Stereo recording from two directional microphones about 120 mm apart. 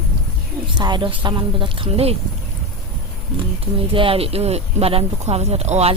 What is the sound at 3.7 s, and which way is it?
Speech, 50° right (ahead or behind).